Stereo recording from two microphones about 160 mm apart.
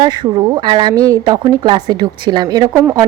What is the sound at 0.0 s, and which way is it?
A woman's voice, 30° right (ahead or behind).